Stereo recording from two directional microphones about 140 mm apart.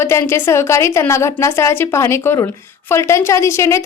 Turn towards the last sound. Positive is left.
turn(degrees=20)  # may be behind; listen again after turning